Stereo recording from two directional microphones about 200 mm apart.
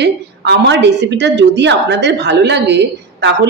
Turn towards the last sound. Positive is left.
turn(degrees=-60)  # may be behind; listen again after turning